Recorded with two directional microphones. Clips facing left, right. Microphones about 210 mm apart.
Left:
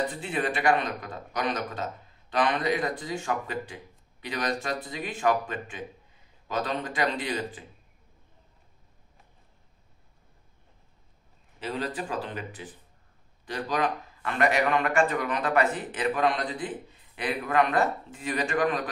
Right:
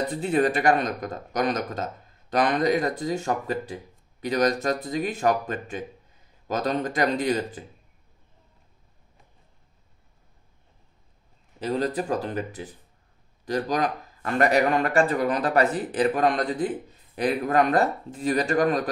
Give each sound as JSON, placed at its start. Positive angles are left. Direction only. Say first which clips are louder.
{"t": 0.1, "sound": "a man's voice", "louder": "right 7 dB", "side_deg": -40}
{"t": 11.6, "sound": "a man's voice", "louder": "right 6 dB", "side_deg": -40}